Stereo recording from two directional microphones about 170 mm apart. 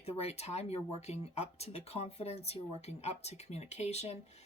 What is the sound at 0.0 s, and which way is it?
Speech, 40° left (ahead or behind).